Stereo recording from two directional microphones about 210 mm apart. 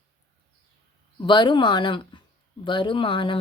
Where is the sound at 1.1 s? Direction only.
20° left (ahead or behind).